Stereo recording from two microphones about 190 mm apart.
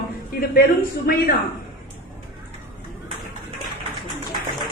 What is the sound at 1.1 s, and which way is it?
Speech, 50° left (ahead or behind).